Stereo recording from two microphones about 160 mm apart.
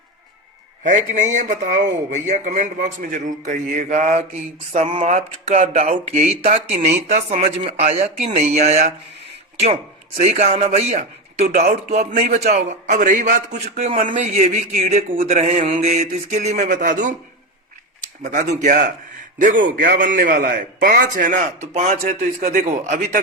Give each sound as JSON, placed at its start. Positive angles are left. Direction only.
{"t": 0.9, "sound": "speech", "side_deg": -50}
{"t": 4.8, "sound": "speech", "side_deg": -35}
{"t": 10.2, "sound": "speech", "side_deg": -45}
{"t": 12.9, "sound": "speech", "side_deg": -55}
{"t": 18.2, "sound": "a man's voice", "side_deg": -50}